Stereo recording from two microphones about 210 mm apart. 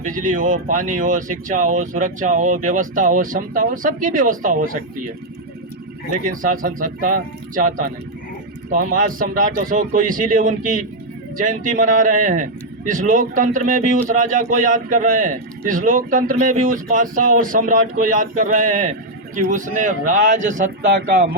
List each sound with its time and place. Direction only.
0.0 s a man's voice: 40° right (ahead or behind)
6.4 s a man's voice: 40° right (ahead or behind)